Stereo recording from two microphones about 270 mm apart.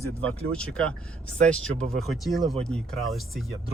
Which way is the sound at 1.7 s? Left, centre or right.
Right.